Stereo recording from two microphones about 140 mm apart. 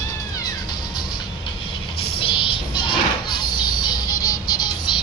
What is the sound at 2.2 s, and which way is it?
Music, 35° left (ahead or behind).